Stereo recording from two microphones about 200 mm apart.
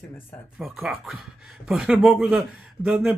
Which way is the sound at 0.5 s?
Centre (ahead or behind).